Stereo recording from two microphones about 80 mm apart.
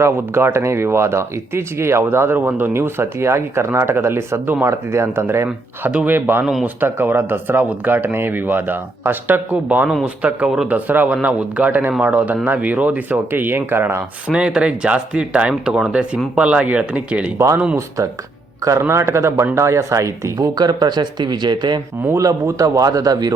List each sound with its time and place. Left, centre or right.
0.0 s speech: right
5.9 s speech: centre
6.1 s speech: right
6.4 s speech: centre
6.7 s speech: right
14.3 s speech: centre
17.3 s speech: right
20.6 s speech: right
22.2 s a man's voice: right